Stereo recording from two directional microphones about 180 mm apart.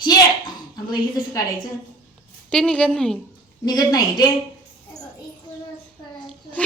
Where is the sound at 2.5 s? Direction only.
5° left (ahead or behind).